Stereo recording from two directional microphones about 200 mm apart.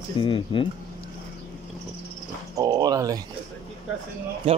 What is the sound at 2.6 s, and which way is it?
Speech, 20° right (ahead or behind).